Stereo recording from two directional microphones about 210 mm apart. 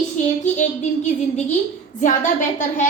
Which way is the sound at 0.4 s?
35° left (ahead or behind).